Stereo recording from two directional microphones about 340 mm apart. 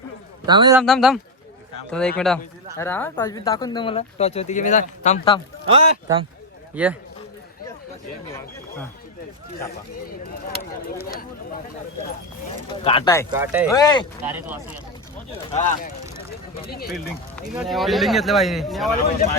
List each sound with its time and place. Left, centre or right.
0.4 s speech: centre
0.8 s speech: centre
5.6 s speech: centre
6.8 s speech: centre
12.8 s speech: centre
13.3 s speech: centre
13.7 s speech: centre
14.3 s speech: centre
15.4 s speech: centre
17.5 s speech: centre